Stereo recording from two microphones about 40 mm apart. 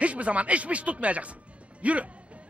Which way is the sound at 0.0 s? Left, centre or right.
Right.